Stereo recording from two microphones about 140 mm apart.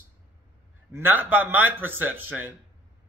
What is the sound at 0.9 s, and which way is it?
A man's voice, 15° right (ahead or behind).